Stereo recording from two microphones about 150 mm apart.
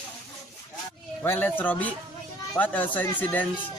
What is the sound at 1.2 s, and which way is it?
Speech, 15° left (ahead or behind).